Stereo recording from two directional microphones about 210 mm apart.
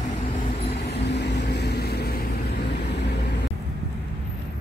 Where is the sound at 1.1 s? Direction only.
55° left (ahead or behind).